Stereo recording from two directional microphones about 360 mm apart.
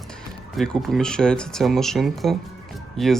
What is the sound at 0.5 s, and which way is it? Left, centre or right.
Speech, centre.